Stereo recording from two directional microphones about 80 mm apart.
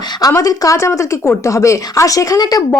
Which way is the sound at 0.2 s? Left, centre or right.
Left.